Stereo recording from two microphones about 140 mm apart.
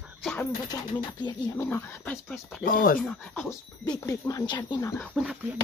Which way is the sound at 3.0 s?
5° left (ahead or behind).